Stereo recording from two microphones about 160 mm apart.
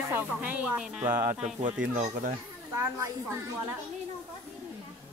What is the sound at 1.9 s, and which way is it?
Speech, 50° right (ahead or behind).